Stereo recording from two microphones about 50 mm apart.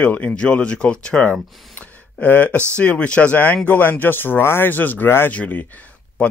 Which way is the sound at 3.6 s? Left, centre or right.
Left.